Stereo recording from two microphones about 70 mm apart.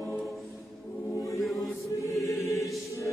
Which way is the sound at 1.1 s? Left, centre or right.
Left.